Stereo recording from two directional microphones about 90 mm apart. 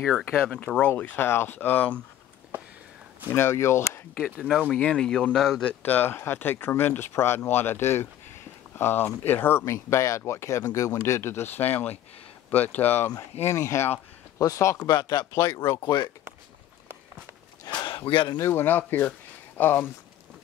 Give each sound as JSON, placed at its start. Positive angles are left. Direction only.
{"t": 0.2, "sound": "speech", "side_deg": 25}
{"t": 3.3, "sound": "speech", "side_deg": 30}
{"t": 4.2, "sound": "speech", "side_deg": -5}
{"t": 4.6, "sound": "speech", "side_deg": 10}
{"t": 5.7, "sound": "speech", "side_deg": 20}
{"t": 14.9, "sound": "speech", "side_deg": 55}
{"t": 15.3, "sound": "speech", "side_deg": 30}
{"t": 17.7, "sound": "a sound", "side_deg": 70}
{"t": 18.4, "sound": "speech", "side_deg": 25}